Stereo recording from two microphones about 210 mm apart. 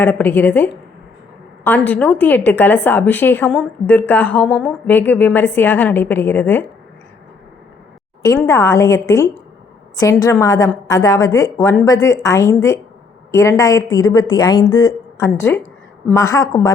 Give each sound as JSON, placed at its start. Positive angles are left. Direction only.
{"t": 0.0, "sound": "a woman's voice", "side_deg": 10}
{"t": 8.2, "sound": "a woman's voice", "side_deg": 15}